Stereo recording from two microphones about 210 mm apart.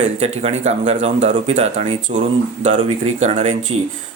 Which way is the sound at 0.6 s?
35° right (ahead or behind).